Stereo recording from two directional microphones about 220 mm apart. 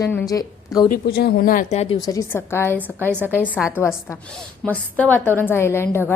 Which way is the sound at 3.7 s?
10° left (ahead or behind).